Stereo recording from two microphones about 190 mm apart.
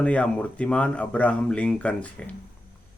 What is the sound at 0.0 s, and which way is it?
Speech, 5° left (ahead or behind).